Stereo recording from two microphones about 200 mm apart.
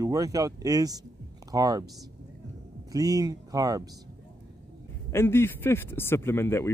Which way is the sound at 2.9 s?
15° right (ahead or behind).